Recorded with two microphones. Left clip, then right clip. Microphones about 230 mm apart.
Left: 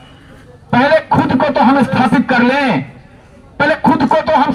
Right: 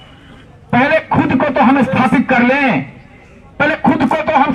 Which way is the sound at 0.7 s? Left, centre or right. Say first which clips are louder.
Left 2 dB; left.